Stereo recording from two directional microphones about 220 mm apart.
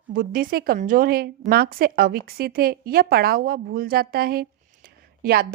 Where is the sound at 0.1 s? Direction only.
40° right (ahead or behind).